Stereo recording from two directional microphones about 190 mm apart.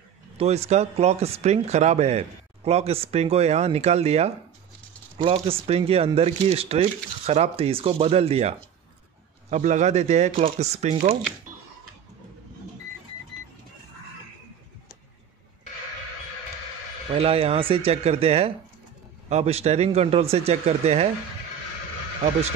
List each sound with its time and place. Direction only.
0.4 s speech: 35° right (ahead or behind)
17.1 s speech: 30° right (ahead or behind)